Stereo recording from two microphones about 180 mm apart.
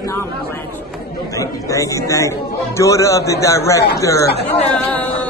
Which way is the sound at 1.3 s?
20° left (ahead or behind).